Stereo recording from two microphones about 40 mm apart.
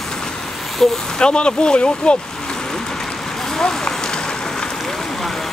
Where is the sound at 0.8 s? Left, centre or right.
Centre.